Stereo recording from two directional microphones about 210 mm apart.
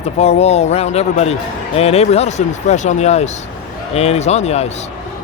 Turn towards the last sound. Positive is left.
turn(degrees=30)  # may be behind; listen again after turning